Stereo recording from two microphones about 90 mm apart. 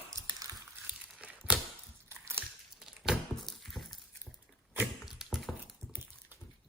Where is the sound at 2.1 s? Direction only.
30° right (ahead or behind).